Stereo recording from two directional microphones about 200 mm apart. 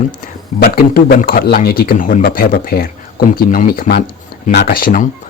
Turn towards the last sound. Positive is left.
turn(degrees=45)  # may be behind; listen again after turning